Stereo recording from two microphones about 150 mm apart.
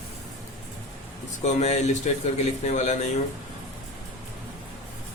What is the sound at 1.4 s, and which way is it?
A man's voice, 50° left (ahead or behind).